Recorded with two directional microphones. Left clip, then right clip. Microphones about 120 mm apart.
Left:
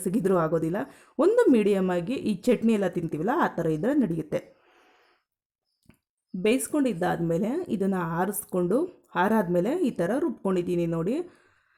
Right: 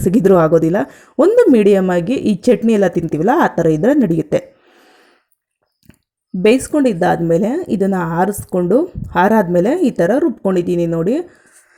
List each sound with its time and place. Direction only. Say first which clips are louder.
0.0 s speech: right 14 dB; 35° right (ahead or behind)
6.4 s speech: right 12 dB; 30° right (ahead or behind)